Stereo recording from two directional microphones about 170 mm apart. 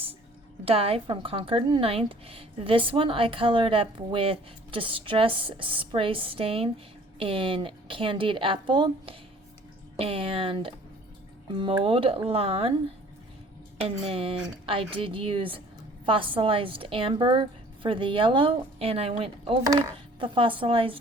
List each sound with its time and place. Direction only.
0.6 s speech: 35° right (ahead or behind)
13.8 s speech: 35° right (ahead or behind)